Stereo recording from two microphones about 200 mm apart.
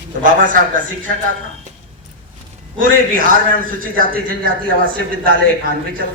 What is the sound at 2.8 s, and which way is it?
A man's voice, 45° right (ahead or behind).